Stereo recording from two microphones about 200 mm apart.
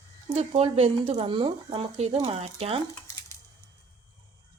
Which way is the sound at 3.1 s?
15° left (ahead or behind).